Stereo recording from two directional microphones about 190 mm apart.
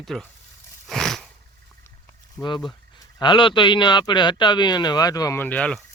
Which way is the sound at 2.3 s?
25° left (ahead or behind).